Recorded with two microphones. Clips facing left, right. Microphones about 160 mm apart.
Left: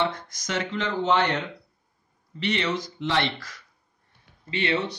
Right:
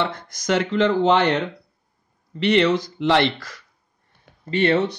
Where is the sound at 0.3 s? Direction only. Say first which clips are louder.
Right 8 dB; 80° right.